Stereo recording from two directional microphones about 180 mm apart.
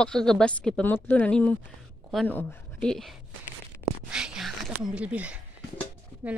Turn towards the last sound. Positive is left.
turn(degrees=-10)  # may be behind; listen again after turning